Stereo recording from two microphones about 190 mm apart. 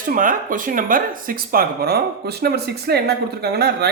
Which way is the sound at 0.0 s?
45° right (ahead or behind).